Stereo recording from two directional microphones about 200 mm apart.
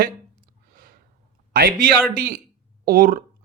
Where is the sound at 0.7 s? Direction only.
45° right (ahead or behind).